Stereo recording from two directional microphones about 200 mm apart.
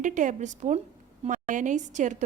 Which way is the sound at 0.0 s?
40° right (ahead or behind).